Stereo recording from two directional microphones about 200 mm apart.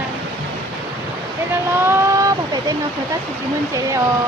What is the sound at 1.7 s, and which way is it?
Speech, 10° right (ahead or behind).